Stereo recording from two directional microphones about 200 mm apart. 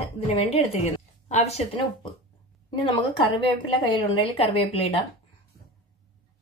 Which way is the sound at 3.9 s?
25° left (ahead or behind).